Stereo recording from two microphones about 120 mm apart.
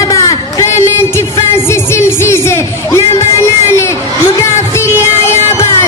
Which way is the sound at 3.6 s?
25° left (ahead or behind).